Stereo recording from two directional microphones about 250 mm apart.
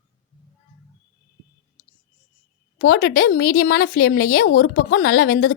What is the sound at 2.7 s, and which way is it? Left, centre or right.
A woman's voice, left.